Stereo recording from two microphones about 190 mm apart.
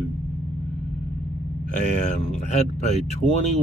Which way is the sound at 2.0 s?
40° left (ahead or behind).